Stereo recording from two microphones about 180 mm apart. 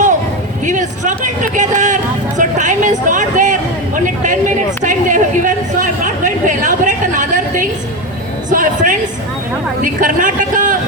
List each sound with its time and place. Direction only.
0.6 s speech: 45° right (ahead or behind)
2.4 s a sound: 45° right (ahead or behind)
9.8 s speech: 45° right (ahead or behind)